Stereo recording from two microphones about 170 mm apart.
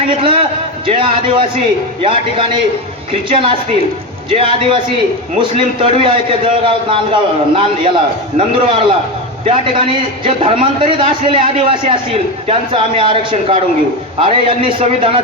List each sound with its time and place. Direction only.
0.1 s a man's voice: 30° right (ahead or behind)